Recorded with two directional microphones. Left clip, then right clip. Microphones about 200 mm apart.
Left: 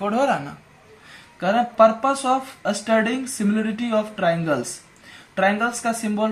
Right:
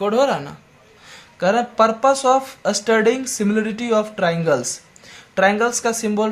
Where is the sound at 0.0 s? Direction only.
40° right (ahead or behind).